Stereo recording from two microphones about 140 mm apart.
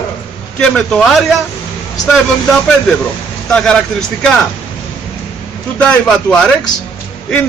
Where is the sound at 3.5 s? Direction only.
5° left (ahead or behind).